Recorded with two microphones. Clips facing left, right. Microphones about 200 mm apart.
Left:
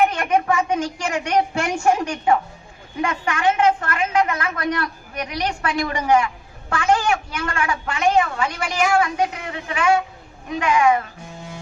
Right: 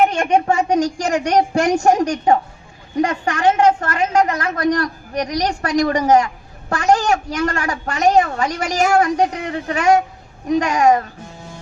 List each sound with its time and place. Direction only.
0.0 s a woman's voice: 25° right (ahead or behind); by 11.1 s 40° right (ahead or behind)